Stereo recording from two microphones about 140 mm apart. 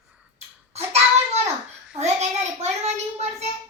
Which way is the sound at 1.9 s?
50° right (ahead or behind).